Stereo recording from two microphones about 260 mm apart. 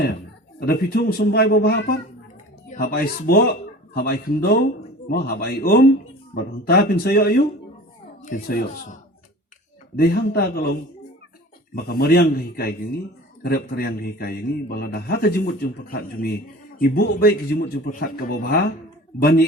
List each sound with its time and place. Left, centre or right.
0.6 s a man's voice: left